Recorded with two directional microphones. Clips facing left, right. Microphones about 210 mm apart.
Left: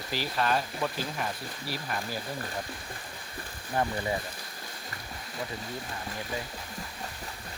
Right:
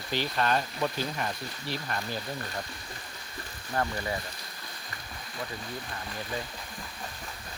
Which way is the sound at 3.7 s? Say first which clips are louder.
Left 1 dB; 15° left (ahead or behind).